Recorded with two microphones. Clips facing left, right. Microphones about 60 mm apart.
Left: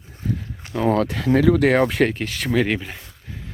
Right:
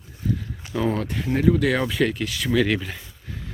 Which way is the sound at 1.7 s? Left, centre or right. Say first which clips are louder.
Left 4 dB; left.